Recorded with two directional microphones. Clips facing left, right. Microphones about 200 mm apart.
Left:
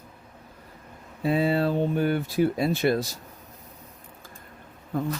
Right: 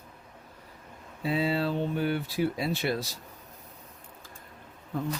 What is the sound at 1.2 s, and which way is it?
Speech, 50° left (ahead or behind).